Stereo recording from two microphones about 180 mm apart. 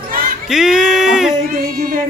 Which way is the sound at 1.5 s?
55° right (ahead or behind).